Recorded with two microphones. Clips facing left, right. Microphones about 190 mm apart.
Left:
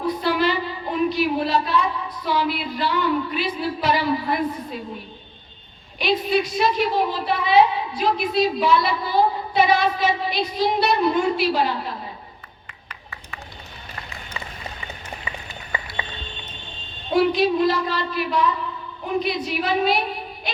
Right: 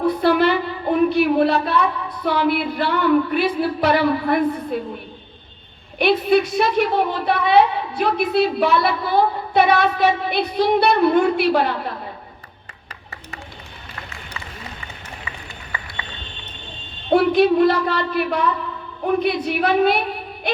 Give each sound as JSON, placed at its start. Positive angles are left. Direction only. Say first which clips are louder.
{"t": 0.1, "sound": "a woman's voice", "louder": "right 3 dB", "side_deg": -60}
{"t": 6.0, "sound": "a woman's voice", "louder": "right 5 dB", "side_deg": -60}
{"t": 17.1, "sound": "a woman's voice", "louder": "right 4 dB", "side_deg": -60}